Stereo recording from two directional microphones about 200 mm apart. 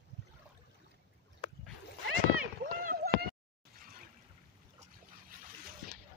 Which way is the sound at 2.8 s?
50° right (ahead or behind).